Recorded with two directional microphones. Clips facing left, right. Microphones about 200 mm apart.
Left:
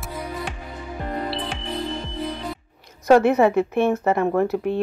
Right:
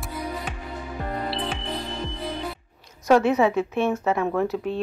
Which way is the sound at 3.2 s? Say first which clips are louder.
Left 3 dB; 55° left (ahead or behind).